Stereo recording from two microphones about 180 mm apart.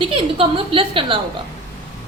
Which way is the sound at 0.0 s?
30° right (ahead or behind).